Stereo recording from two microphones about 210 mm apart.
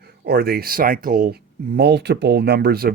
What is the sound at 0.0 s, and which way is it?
Speech, 50° right (ahead or behind).